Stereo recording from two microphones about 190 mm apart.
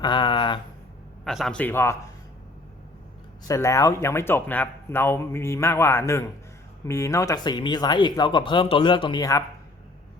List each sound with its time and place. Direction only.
0.0 s a sound: 25° left (ahead or behind)
1.2 s speech: centre (ahead or behind)
3.4 s speech: 15° left (ahead or behind)